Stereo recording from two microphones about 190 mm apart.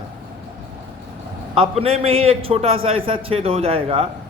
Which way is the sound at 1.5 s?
30° right (ahead or behind).